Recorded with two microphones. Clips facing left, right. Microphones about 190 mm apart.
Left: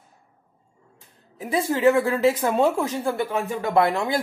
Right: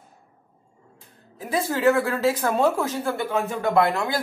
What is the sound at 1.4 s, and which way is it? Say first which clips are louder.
Speech: left 2 dB; 15° left (ahead or behind).